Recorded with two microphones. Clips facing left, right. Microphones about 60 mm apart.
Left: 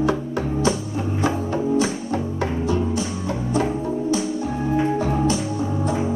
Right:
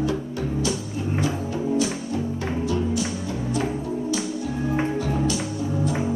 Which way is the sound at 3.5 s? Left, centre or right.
Left.